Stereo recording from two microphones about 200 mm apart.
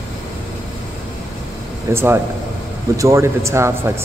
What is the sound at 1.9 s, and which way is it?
Speech, 10° right (ahead or behind).